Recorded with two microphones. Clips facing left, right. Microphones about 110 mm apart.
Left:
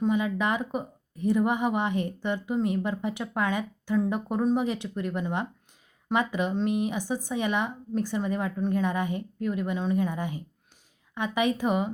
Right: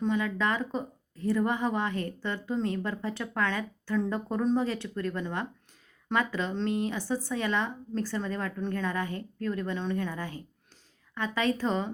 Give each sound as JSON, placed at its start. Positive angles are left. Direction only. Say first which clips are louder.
{"t": 0.0, "sound": "speech", "louder": "left 2 dB", "side_deg": 15}